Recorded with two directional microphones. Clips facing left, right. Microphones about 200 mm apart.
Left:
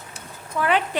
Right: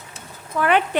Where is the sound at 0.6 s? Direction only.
90° right.